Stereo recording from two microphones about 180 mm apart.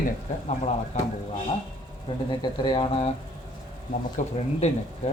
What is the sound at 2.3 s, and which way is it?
Speech, 25° left (ahead or behind).